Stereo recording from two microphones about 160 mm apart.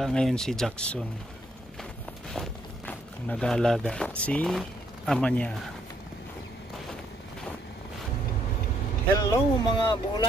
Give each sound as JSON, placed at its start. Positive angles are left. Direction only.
{"t": 0.0, "sound": "speech", "side_deg": 5}
{"t": 2.3, "sound": "a sound", "side_deg": 5}
{"t": 4.2, "sound": "speech", "side_deg": 5}
{"t": 9.1, "sound": "speech", "side_deg": 25}